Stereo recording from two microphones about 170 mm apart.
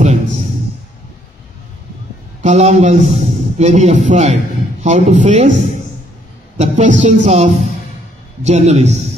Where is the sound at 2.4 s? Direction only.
40° right (ahead or behind).